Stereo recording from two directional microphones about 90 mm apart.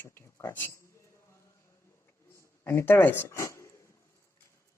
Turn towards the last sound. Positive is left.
turn(degrees=35)  # may be behind; listen again after turning